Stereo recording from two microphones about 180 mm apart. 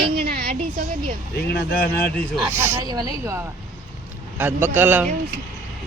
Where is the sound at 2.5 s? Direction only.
10° right (ahead or behind).